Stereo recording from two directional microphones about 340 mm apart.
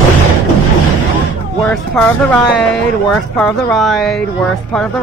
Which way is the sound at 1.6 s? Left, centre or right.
Centre.